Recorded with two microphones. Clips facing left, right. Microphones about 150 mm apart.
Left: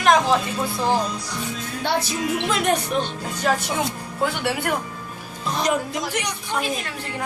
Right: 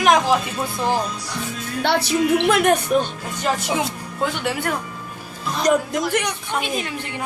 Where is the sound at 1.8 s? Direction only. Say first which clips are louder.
Right 5 dB; 70° right (ahead or behind).